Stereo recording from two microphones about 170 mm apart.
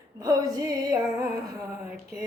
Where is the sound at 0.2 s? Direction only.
20° right (ahead or behind).